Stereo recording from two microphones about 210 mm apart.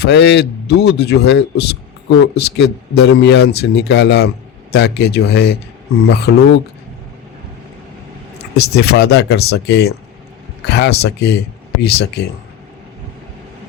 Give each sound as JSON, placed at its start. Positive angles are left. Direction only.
{"t": 0.0, "sound": "speech", "side_deg": 55}
{"t": 8.5, "sound": "speech", "side_deg": 50}